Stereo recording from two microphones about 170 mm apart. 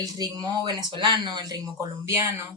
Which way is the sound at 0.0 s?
20° right (ahead or behind).